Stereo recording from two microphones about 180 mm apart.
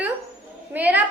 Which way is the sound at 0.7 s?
10° right (ahead or behind).